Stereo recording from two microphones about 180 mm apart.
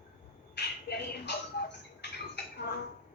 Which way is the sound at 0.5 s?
70° left (ahead or behind).